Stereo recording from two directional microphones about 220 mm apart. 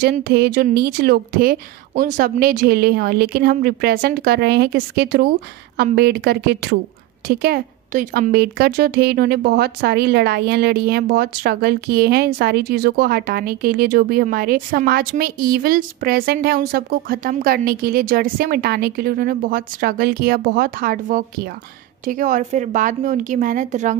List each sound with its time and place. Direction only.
0.0 s a woman's voice: 45° right (ahead or behind)